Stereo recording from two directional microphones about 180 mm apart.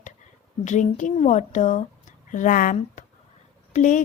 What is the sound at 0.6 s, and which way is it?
Speech, 40° left (ahead or behind).